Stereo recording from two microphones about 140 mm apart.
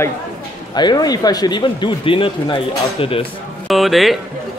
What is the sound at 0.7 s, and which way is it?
Speech, 30° left (ahead or behind).